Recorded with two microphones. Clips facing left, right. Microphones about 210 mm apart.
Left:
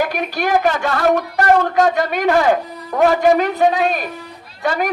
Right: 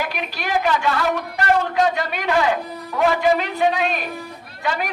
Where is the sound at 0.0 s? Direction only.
45° left (ahead or behind).